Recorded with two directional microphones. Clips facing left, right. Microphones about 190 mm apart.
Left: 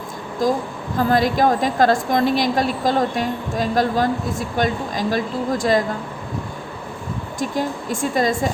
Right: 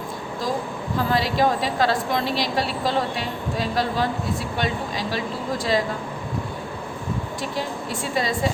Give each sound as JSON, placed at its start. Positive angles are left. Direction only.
{"t": 0.4, "sound": "a woman's voice", "side_deg": 45}
{"t": 7.3, "sound": "a woman's voice", "side_deg": 45}